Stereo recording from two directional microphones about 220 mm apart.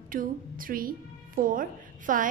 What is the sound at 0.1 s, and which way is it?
A woman's voice, 40° right (ahead or behind).